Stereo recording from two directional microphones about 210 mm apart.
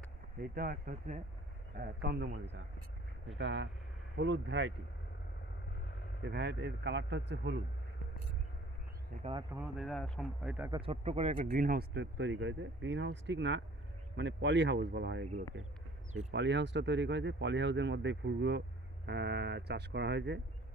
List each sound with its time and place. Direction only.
0.4 s speech: 45° right (ahead or behind)
1.8 s speech: 50° right (ahead or behind)
6.2 s speech: 55° right (ahead or behind)
9.1 s speech: 40° right (ahead or behind)
9.6 s speech: centre (ahead or behind)
10.7 s speech: 25° right (ahead or behind); by 15.2 s 55° right (ahead or behind)
16.3 s speech: 55° right (ahead or behind)